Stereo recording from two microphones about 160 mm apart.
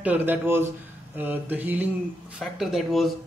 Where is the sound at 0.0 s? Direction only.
10° right (ahead or behind).